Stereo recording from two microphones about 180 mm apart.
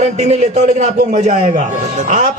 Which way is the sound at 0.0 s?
40° right (ahead or behind).